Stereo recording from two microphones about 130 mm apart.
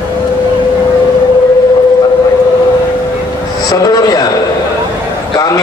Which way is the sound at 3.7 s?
30° left (ahead or behind).